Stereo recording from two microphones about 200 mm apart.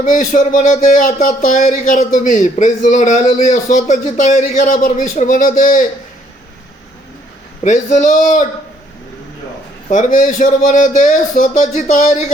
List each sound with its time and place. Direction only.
0.0 s speech: 40° left (ahead or behind)
7.6 s speech: 35° left (ahead or behind)
9.9 s speech: 40° left (ahead or behind)